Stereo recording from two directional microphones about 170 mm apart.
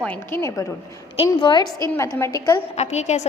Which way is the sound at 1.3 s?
25° left (ahead or behind).